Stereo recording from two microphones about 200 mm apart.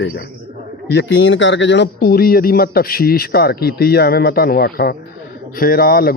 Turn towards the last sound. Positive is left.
turn(degrees=50)  # may be behind; listen again after turning